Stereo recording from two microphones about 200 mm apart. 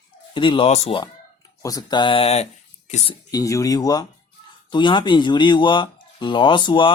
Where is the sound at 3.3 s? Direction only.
15° left (ahead or behind).